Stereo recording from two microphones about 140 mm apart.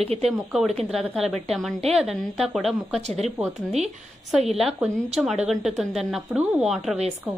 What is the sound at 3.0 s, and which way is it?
Speech, 50° right (ahead or behind).